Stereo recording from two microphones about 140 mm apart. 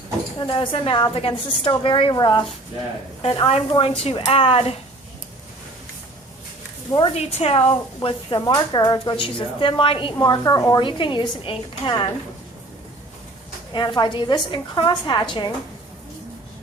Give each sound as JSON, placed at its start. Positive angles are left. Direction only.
{"t": 0.3, "sound": "a woman's voice", "side_deg": 35}
{"t": 6.9, "sound": "a woman's voice", "side_deg": 40}
{"t": 13.7, "sound": "speech", "side_deg": 35}